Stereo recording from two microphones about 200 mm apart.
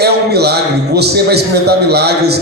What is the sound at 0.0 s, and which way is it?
A man's voice, 55° right (ahead or behind).